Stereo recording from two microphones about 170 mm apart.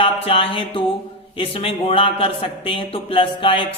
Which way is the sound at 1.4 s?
35° left (ahead or behind).